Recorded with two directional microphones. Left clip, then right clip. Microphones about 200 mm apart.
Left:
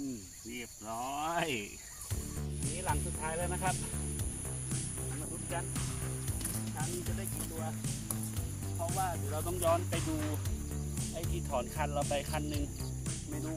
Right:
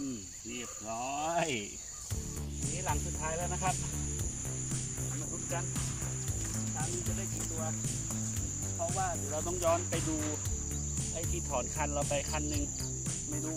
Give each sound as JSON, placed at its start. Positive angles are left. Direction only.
{"t": 0.9, "sound": "speech", "side_deg": -20}
{"t": 2.8, "sound": "speech", "side_deg": 20}
{"t": 8.9, "sound": "music", "side_deg": 0}
{"t": 11.5, "sound": "music", "side_deg": 5}